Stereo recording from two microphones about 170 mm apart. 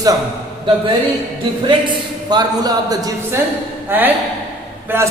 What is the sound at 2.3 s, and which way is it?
Speech, 25° right (ahead or behind).